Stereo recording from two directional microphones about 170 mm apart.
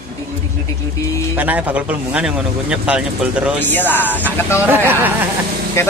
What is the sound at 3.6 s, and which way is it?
Speech, 10° left (ahead or behind).